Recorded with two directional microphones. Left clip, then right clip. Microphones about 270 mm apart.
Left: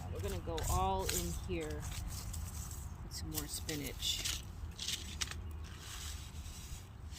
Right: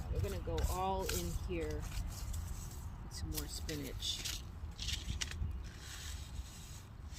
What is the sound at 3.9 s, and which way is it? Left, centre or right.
Speech, left.